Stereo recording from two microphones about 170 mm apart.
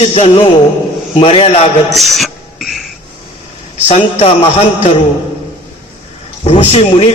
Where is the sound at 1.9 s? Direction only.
Centre (ahead or behind).